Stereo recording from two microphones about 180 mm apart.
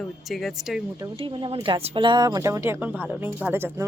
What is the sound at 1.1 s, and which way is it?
Speech, 30° right (ahead or behind).